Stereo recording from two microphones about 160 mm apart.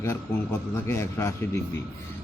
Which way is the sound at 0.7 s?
15° left (ahead or behind).